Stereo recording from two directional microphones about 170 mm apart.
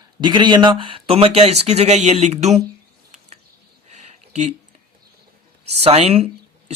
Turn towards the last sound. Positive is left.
turn(degrees=-40)  # may be behind; listen again after turning